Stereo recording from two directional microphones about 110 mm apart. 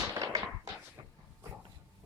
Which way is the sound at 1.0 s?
35° right (ahead or behind).